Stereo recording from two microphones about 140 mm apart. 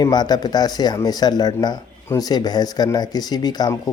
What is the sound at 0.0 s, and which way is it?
Speech, 30° left (ahead or behind).